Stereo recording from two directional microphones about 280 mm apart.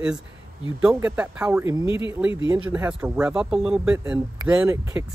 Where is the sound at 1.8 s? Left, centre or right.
Centre.